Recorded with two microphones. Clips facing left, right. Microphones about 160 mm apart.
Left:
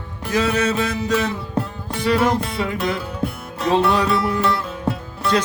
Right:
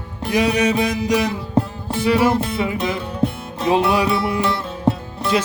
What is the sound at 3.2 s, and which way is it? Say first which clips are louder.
Music: right 4 dB; 15° right (ahead or behind).